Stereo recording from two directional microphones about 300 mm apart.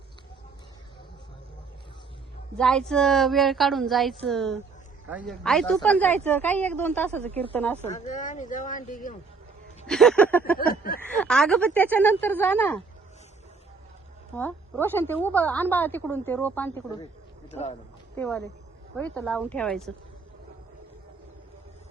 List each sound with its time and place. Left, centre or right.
2.6 s a woman's voice: centre
7.9 s speech: left
9.8 s a sound: centre
10.3 s a woman's voice: centre
10.6 s speech: left
11.1 s a woman's voice: centre
14.8 s a woman's voice: centre
17.5 s speech: left
18.2 s a woman's voice: centre